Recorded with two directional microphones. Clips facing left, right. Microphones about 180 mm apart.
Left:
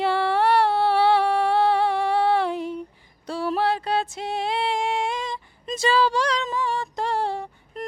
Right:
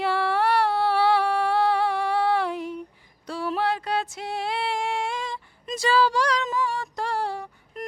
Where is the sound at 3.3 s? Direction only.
35° left (ahead or behind).